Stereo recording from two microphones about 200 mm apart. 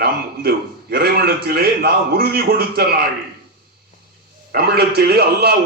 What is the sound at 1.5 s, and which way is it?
A man's voice, 50° right (ahead or behind).